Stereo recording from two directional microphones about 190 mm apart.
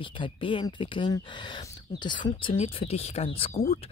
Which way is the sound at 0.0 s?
25° left (ahead or behind).